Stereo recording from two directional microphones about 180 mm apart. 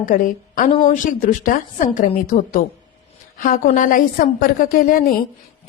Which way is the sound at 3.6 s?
45° left (ahead or behind).